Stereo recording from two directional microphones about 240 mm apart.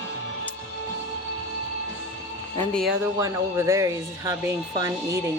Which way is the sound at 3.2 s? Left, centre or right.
Centre.